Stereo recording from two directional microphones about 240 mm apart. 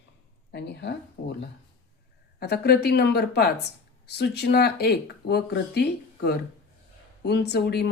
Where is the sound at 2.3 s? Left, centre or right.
Left.